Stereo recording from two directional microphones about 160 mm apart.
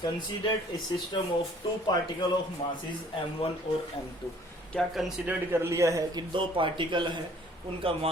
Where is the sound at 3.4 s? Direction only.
35° left (ahead or behind).